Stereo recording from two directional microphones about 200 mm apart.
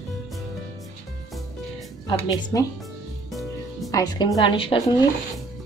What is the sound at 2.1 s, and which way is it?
Speech, 15° left (ahead or behind).